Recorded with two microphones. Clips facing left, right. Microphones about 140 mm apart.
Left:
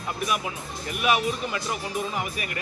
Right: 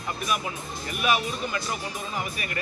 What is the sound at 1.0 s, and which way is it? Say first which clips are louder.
Speech: left 2 dB; 20° left (ahead or behind).